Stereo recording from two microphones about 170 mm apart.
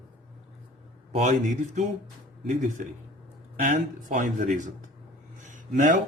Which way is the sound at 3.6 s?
50° right (ahead or behind).